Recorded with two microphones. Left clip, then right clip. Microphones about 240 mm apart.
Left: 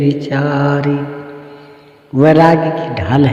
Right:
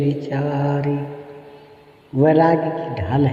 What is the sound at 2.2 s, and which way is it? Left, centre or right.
Mantra, left.